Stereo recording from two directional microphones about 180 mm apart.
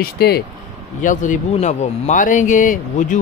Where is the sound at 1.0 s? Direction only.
45° left (ahead or behind).